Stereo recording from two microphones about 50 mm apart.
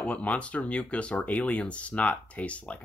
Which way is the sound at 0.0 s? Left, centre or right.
Left.